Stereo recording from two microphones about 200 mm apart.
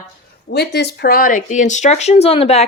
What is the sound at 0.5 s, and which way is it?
Speech, 55° left (ahead or behind).